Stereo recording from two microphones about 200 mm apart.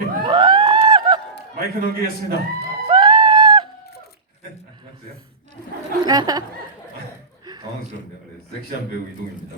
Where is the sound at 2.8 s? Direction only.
25° right (ahead or behind).